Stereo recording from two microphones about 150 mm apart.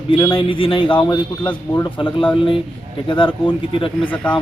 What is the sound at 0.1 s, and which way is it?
Speech, 35° left (ahead or behind).